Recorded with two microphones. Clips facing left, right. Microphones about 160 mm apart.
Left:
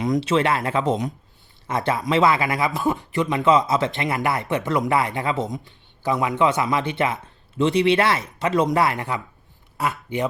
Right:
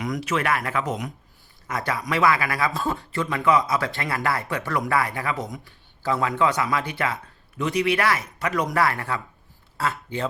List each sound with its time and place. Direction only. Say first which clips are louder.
0.0 s speech: left 6 dB; 25° left (ahead or behind)